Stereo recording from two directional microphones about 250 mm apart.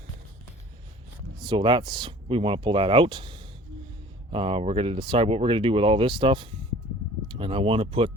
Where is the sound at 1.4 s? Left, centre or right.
Centre.